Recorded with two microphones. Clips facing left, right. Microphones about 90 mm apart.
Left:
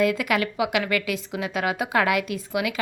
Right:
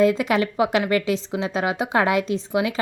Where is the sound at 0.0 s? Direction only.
25° right (ahead or behind).